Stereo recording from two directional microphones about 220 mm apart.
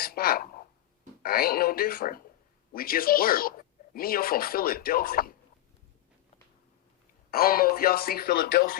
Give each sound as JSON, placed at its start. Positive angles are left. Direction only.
{"t": 0.0, "sound": "speech", "side_deg": 45}
{"t": 7.3, "sound": "speech", "side_deg": 45}